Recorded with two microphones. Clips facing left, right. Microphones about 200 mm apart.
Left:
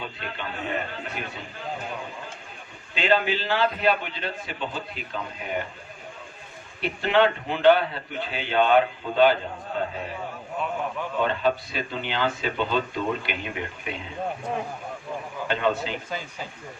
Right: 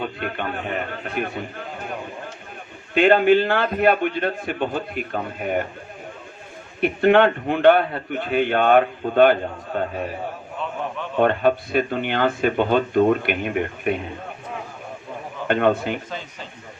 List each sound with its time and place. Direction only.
0.0 s a man's voice: 55° right (ahead or behind)
2.9 s a man's voice: 55° right (ahead or behind)
6.8 s a man's voice: 55° right (ahead or behind)
11.2 s a man's voice: 55° right (ahead or behind)
15.4 s a man's voice: 55° right (ahead or behind)
16.0 s speech: 10° left (ahead or behind)